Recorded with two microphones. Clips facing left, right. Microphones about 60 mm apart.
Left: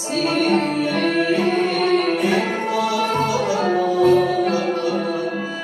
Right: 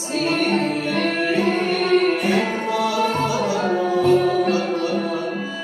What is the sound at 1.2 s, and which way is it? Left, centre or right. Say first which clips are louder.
Music: left 2 dB; right.